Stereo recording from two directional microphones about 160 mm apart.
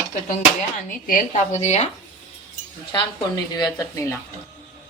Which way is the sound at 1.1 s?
55° left (ahead or behind).